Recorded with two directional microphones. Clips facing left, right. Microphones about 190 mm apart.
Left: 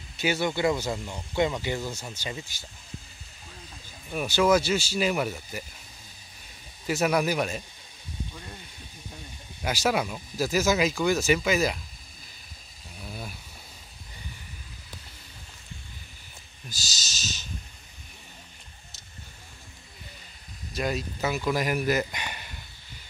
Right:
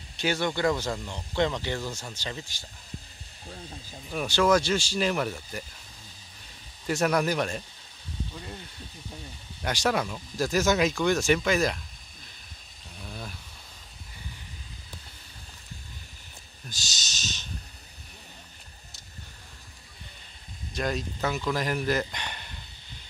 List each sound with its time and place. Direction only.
0.2 s speech: 10° left (ahead or behind)
3.4 s speech: 35° right (ahead or behind)
4.1 s speech: 5° left (ahead or behind)
6.9 s speech: 5° left (ahead or behind)
9.6 s speech: 5° left (ahead or behind)
12.9 s a sound: 10° left (ahead or behind)
16.6 s a sound: 5° left (ahead or behind)
20.7 s speech: 5° left (ahead or behind)